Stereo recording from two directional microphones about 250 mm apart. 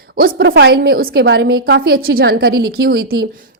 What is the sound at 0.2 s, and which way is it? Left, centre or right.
A woman's voice, right.